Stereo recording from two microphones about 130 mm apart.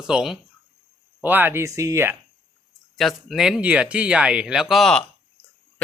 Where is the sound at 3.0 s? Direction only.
Centre (ahead or behind).